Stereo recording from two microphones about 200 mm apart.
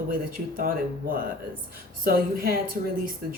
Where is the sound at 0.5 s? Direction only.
45° right (ahead or behind).